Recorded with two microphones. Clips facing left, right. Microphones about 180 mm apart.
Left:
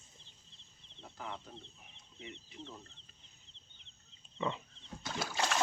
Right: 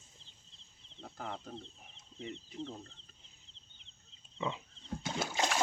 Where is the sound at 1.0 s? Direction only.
40° right (ahead or behind).